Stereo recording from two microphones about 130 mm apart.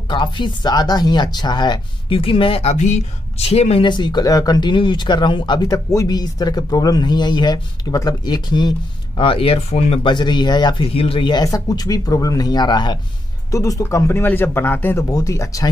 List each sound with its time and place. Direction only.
0.1 s speech: 40° left (ahead or behind)
3.8 s speech: 35° left (ahead or behind)
9.2 s speech: 45° left (ahead or behind)
10.9 s speech: 45° left (ahead or behind)
11.4 s speech: 30° left (ahead or behind)